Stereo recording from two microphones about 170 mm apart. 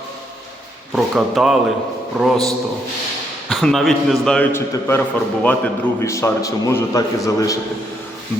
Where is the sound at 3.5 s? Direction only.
Centre (ahead or behind).